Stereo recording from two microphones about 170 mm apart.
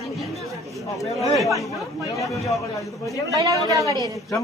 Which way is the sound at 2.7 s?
20° left (ahead or behind).